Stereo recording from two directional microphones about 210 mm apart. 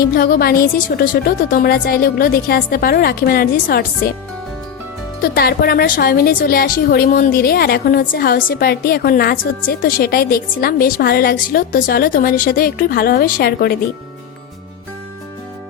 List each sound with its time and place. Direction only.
0.1 s a woman's voice: 45° left (ahead or behind)
5.3 s a woman's voice: 45° left (ahead or behind)